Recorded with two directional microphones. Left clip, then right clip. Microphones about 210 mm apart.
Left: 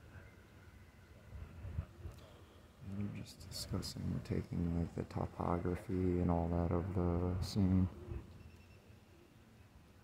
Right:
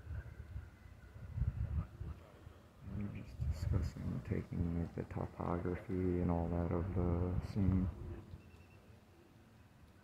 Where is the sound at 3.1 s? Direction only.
10° left (ahead or behind).